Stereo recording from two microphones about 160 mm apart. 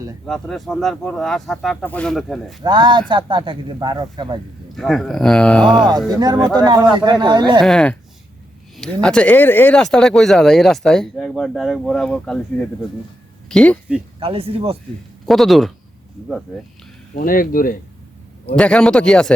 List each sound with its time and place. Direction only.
0.3 s speech: centre (ahead or behind)
2.6 s speech: 30° right (ahead or behind)
4.8 s speech: centre (ahead or behind)
6.1 s speech: 25° right (ahead or behind)
7.6 s speech: centre (ahead or behind)
14.2 s speech: 35° right (ahead or behind)
15.3 s speech: centre (ahead or behind)
17.2 s speech: 60° left (ahead or behind)
18.5 s speech: 5° left (ahead or behind)